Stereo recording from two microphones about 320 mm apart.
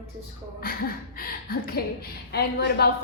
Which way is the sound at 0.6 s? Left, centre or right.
Left.